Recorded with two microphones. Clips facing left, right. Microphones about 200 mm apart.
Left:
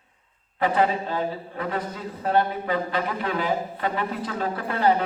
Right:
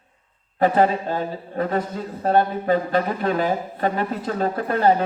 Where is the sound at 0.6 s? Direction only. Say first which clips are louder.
Right 4 dB; 45° right (ahead or behind).